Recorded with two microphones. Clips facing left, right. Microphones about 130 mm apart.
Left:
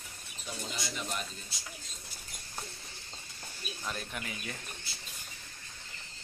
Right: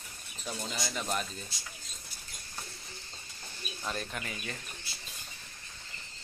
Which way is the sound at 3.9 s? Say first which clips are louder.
Right 2 dB; 5° left (ahead or behind).